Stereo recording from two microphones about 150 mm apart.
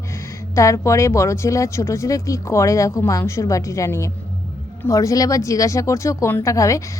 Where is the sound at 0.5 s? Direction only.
20° left (ahead or behind).